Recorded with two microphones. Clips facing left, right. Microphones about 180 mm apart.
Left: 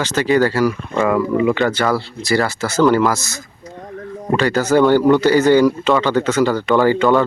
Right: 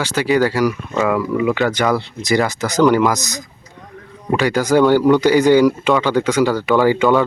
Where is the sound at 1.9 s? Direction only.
20° right (ahead or behind).